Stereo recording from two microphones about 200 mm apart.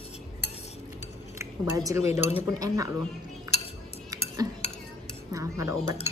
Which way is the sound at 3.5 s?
15° right (ahead or behind).